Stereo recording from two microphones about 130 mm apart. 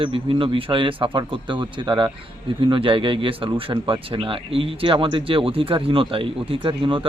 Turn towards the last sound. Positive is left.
turn(degrees=-40)  # may be behind; listen again after turning